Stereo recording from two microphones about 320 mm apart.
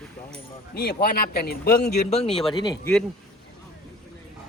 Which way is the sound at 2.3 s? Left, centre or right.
Centre.